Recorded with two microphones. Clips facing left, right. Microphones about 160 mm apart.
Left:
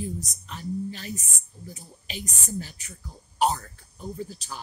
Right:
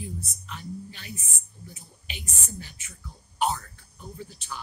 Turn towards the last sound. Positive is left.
turn(degrees=40)  # may be behind; listen again after turning